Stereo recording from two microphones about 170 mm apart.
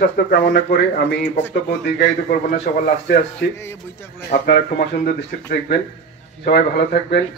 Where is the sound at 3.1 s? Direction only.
80° left.